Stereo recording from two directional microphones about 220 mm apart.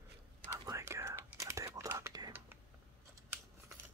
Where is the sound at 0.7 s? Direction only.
15° right (ahead or behind).